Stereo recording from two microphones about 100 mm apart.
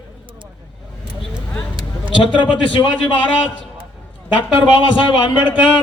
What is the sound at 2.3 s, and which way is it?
Speech, 55° left (ahead or behind).